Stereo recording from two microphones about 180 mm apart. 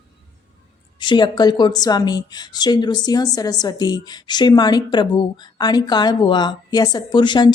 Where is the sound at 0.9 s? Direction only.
25° left (ahead or behind).